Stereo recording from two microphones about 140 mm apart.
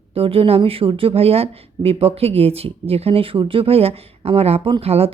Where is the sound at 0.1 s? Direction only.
40° right (ahead or behind).